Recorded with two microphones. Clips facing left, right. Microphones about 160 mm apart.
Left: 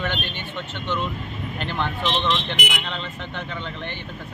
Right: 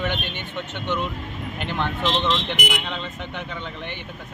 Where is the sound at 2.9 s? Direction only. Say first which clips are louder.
Right 1 dB; 15° right (ahead or behind).